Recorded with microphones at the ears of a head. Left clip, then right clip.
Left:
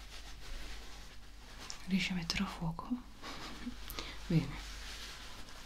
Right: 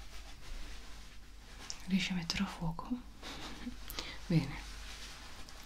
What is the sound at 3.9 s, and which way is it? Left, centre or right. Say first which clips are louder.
Whispering: right 1 dB; centre.